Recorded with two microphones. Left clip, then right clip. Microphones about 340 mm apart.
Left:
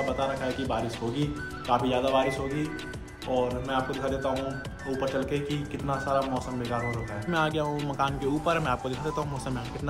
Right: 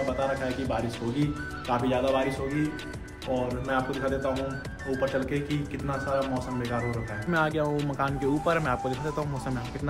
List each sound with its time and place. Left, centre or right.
0.2 s speech: centre
3.6 s speech: centre